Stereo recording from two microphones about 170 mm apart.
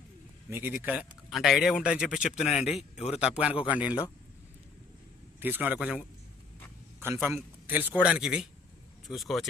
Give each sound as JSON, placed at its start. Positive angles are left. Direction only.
{"t": 0.5, "sound": "speech", "side_deg": -10}
{"t": 2.5, "sound": "speech", "side_deg": 40}
{"t": 3.2, "sound": "a man's voice", "side_deg": -5}
{"t": 5.4, "sound": "a man's voice", "side_deg": -10}